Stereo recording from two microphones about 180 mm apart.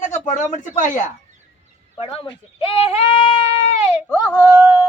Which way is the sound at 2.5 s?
35° left (ahead or behind).